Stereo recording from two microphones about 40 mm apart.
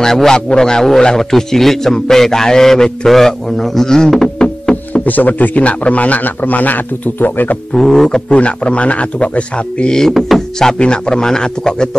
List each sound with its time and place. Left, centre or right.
0.0 s a man's voice: centre
5.0 s a man's voice: left
7.7 s a man's voice: centre
8.4 s a man's voice: left
10.0 s speech: centre
10.7 s a man's voice: centre